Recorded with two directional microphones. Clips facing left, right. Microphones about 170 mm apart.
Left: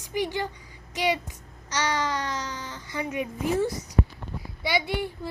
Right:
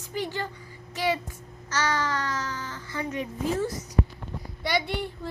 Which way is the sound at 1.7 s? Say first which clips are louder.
Even; 15° left (ahead or behind).